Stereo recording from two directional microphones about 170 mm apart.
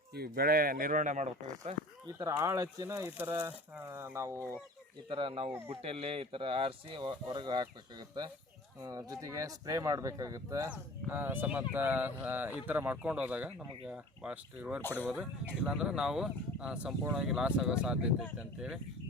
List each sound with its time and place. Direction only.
0.1 s speech: 65° right (ahead or behind); by 1.7 s 45° right (ahead or behind)
2.1 s speech: 20° right (ahead or behind)
5.0 s speech: 30° right (ahead or behind); by 14.8 s 5° right (ahead or behind)
14.8 s speech: 10° left (ahead or behind)
15.0 s speech: 5° right (ahead or behind)